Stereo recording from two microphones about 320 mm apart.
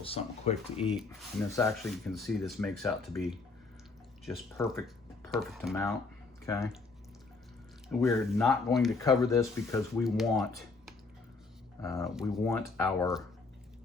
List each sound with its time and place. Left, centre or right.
0.0 s speech: centre
0.9 s speech: centre
7.9 s speech: centre
10.0 s speech: centre
11.8 s speech: centre